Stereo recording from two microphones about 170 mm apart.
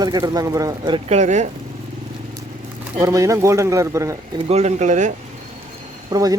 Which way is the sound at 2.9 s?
20° right (ahead or behind).